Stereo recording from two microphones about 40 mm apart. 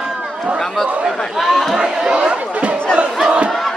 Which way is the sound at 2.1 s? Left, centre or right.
Right.